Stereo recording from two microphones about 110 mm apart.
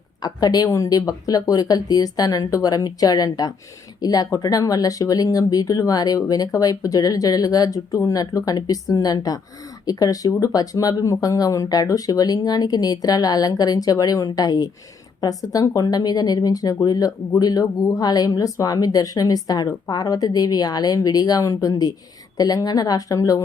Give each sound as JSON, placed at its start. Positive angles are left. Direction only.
{"t": 0.2, "sound": "speech", "side_deg": 35}